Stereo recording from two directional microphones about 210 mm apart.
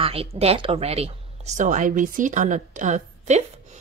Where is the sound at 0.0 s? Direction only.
25° right (ahead or behind).